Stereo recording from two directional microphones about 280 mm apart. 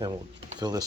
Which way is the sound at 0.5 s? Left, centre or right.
Centre.